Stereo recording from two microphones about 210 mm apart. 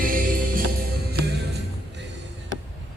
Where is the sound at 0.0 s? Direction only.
40° right (ahead or behind).